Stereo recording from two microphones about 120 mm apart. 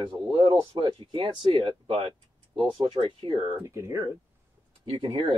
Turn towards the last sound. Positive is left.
turn(degrees=-45)  # may be behind; listen again after turning